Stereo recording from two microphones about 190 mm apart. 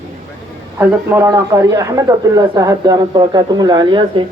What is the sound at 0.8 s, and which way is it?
A man's voice, 10° right (ahead or behind).